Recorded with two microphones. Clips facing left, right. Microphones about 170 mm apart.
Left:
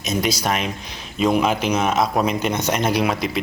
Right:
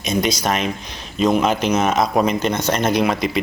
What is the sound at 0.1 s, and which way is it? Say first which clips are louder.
Speech: right 2 dB; 5° left (ahead or behind).